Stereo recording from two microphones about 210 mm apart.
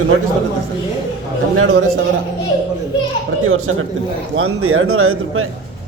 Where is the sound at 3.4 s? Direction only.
80° right.